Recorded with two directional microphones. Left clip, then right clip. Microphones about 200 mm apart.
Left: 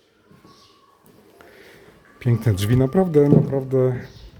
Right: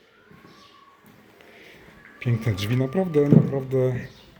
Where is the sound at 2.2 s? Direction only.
35° left (ahead or behind).